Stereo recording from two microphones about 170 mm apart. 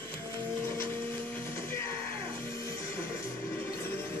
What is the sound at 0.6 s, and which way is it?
Music, 15° left (ahead or behind).